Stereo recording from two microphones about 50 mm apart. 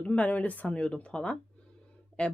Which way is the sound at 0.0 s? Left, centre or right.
Left.